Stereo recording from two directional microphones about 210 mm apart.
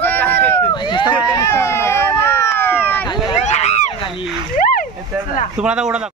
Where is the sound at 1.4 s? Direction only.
10° left (ahead or behind).